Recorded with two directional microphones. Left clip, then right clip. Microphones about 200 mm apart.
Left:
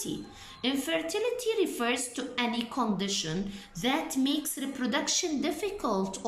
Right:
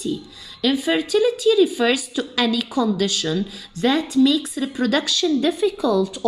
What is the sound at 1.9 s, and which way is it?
Speech, centre (ahead or behind).